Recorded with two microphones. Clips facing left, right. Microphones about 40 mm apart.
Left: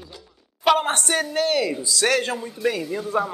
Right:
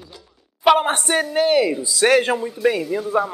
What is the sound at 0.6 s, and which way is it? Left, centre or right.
Speech, centre.